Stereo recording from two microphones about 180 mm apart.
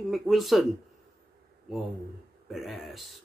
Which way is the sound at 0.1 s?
Centre (ahead or behind).